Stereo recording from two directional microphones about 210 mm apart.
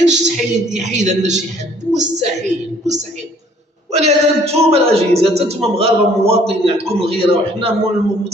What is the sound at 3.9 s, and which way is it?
A man's voice, 30° right (ahead or behind).